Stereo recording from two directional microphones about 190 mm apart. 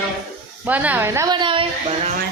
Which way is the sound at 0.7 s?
10° right (ahead or behind).